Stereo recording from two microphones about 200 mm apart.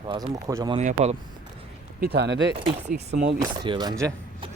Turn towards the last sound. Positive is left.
turn(degrees=-20)  # may be behind; listen again after turning